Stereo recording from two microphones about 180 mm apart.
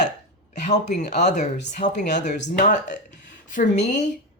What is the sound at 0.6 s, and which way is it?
Speech, 40° left (ahead or behind).